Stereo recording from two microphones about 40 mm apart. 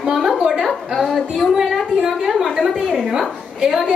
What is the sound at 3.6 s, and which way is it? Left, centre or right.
Speech, centre.